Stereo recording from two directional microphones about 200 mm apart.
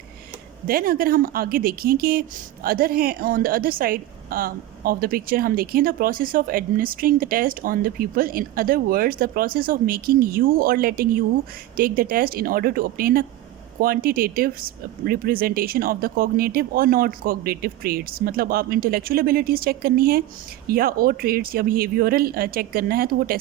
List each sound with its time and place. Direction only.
0.7 s a woman's voice: 45° right (ahead or behind)